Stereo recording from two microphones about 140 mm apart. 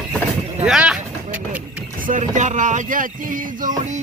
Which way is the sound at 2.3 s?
65° right (ahead or behind).